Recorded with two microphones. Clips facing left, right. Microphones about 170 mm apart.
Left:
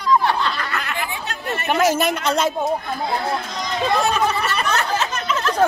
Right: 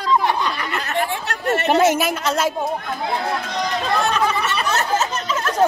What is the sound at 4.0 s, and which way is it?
Speech, 5° left (ahead or behind).